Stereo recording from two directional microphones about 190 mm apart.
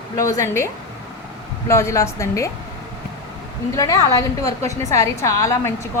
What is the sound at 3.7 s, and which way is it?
A woman's voice, 15° left (ahead or behind).